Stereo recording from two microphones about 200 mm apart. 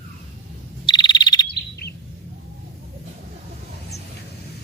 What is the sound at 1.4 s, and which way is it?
Bird vocalization, 55° left (ahead or behind).